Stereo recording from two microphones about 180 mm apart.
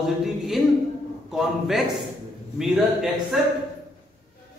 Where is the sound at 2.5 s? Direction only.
5° right (ahead or behind).